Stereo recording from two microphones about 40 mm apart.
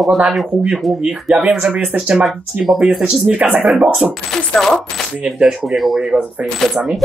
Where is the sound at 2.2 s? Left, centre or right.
Centre.